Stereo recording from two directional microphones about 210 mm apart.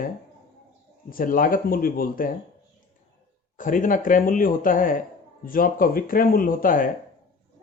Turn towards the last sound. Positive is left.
turn(degrees=40)  # may be behind; listen again after turning